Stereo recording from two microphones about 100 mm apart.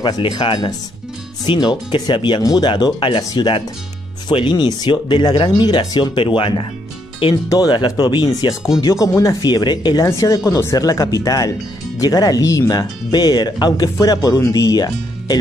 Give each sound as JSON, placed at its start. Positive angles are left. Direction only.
{"t": 0.0, "sound": "speech", "side_deg": 50}
{"t": 2.4, "sound": "speech", "side_deg": 40}
{"t": 2.7, "sound": "speech", "side_deg": 55}
{"t": 7.4, "sound": "speech", "side_deg": 40}
{"t": 9.4, "sound": "speech", "side_deg": 45}
{"t": 10.0, "sound": "speech", "side_deg": 35}